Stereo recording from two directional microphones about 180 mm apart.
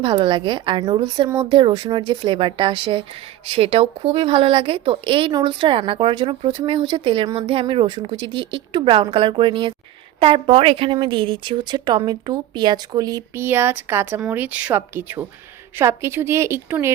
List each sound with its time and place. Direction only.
0.0 s a woman's voice: 25° right (ahead or behind)